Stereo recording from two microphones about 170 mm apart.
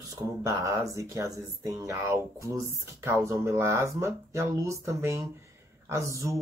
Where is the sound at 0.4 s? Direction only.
15° right (ahead or behind).